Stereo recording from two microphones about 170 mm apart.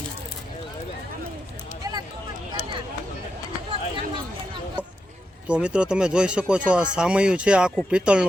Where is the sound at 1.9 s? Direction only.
20° right (ahead or behind).